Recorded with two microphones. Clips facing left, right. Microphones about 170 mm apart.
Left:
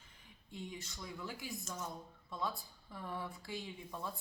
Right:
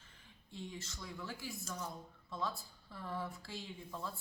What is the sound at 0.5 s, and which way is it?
A man's voice, 15° left (ahead or behind).